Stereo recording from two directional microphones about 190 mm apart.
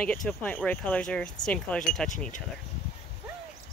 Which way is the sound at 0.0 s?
5° left (ahead or behind).